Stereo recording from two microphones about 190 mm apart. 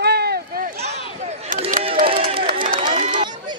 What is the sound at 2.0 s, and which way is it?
Crowd, 30° right (ahead or behind).